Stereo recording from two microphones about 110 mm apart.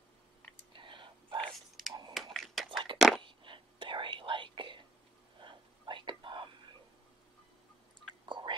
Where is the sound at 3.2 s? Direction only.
45° right (ahead or behind).